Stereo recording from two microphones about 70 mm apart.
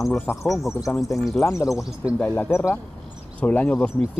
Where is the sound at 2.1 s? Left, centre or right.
Left.